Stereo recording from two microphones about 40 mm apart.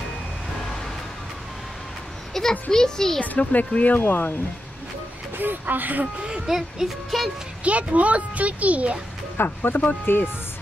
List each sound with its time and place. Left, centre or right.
2.3 s a child's voice: centre
3.2 s speech: left
5.4 s speech: right
6.2 s speech: centre
7.1 s speech: centre
7.6 s speech: right
9.4 s speech: left